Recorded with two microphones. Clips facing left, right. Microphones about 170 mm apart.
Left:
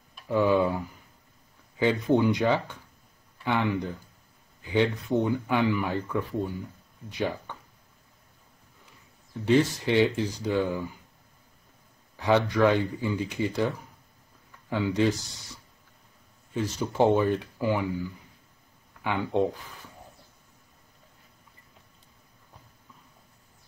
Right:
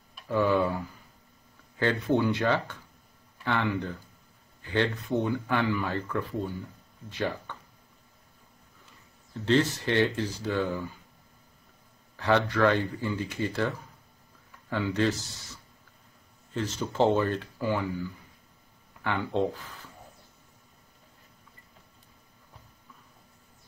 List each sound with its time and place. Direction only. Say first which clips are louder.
0.3 s speech: left 2 dB; 15° left (ahead or behind)
9.3 s speech: left 2 dB; 10° left (ahead or behind)
12.2 s speech: left 2 dB; 15° left (ahead or behind)
16.5 s speech: left 2 dB; 10° left (ahead or behind)